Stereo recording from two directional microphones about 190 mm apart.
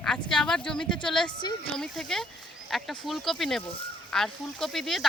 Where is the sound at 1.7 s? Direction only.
Centre (ahead or behind).